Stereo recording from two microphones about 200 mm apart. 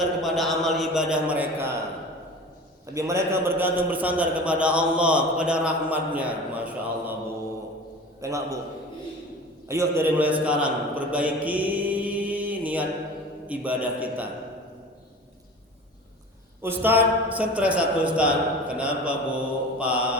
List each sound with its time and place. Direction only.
0.2 s mantra: centre (ahead or behind)
2.9 s a man's voice: 15° right (ahead or behind)
8.2 s a man's voice: 15° right (ahead or behind)
9.6 s a man's voice: 15° right (ahead or behind)
16.6 s a man's voice: 10° right (ahead or behind)